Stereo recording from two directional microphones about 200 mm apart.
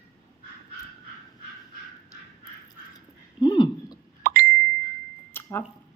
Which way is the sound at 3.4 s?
20° left (ahead or behind).